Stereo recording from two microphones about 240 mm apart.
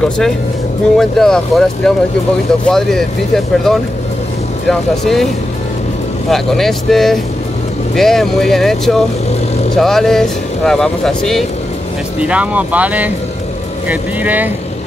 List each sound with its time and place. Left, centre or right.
0.9 s speech: centre
6.3 s speech: centre